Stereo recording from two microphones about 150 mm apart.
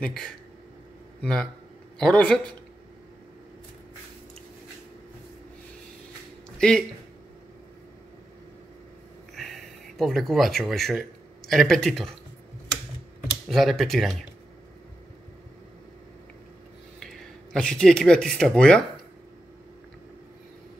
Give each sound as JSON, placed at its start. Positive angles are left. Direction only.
{"t": 0.0, "sound": "speech", "side_deg": 5}
{"t": 9.3, "sound": "speech", "side_deg": 0}
{"t": 13.5, "sound": "speech", "side_deg": 0}
{"t": 17.0, "sound": "speech", "side_deg": 5}